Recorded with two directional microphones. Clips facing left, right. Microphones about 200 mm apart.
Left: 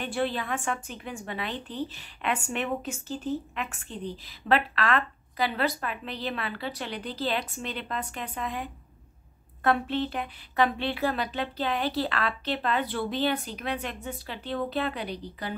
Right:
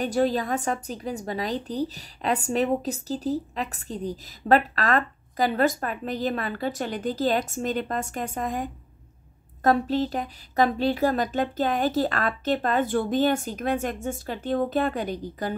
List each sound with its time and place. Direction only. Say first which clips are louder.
0.0 s a woman's voice: right 6 dB; 40° right (ahead or behind)